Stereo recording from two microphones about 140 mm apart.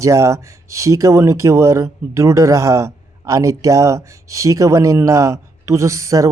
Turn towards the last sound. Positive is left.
turn(degrees=-20)  # may be behind; listen again after turning